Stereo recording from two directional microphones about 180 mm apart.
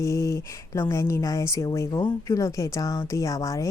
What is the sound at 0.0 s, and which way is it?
Speech, 15° left (ahead or behind).